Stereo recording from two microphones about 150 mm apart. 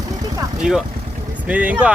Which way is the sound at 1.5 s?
10° right (ahead or behind).